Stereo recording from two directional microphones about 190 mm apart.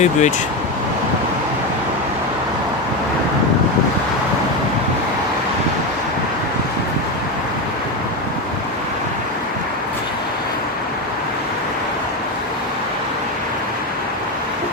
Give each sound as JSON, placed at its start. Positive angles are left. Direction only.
{"t": 0.0, "sound": "speech", "side_deg": 40}